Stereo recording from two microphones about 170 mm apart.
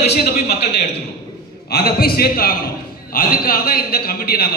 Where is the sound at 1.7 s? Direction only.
65° left (ahead or behind).